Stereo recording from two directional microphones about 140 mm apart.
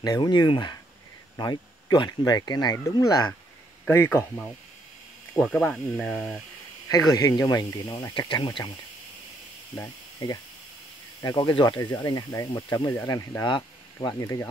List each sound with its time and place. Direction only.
0.0 s speech: 30° left (ahead or behind)
3.8 s a man's voice: 15° left (ahead or behind)
5.3 s speech: 5° left (ahead or behind)
6.9 s speech: 25° left (ahead or behind)
9.8 s speech: 25° left (ahead or behind)